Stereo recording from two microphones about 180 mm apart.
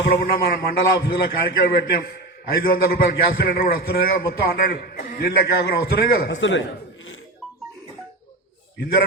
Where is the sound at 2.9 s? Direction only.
55° left (ahead or behind).